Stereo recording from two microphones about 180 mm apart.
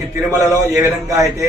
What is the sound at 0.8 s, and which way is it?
Speech, 20° right (ahead or behind).